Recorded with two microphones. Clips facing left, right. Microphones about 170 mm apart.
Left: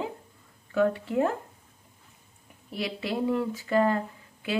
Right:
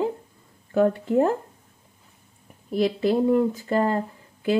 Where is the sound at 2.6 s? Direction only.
40° right (ahead or behind).